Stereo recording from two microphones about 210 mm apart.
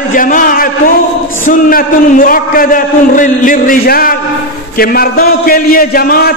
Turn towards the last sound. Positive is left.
turn(degrees=45)  # may be behind; listen again after turning